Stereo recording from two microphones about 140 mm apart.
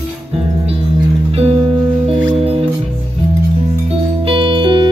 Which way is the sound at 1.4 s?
40° right (ahead or behind).